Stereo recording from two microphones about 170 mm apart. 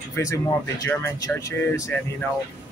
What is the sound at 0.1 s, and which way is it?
Speech, 20° left (ahead or behind).